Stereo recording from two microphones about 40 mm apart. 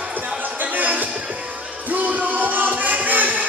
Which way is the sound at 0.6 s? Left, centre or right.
Right.